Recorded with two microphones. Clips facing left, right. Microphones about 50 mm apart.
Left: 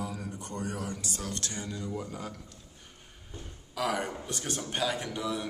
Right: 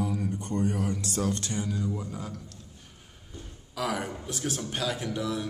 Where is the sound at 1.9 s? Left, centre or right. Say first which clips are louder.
Right 2 dB; centre.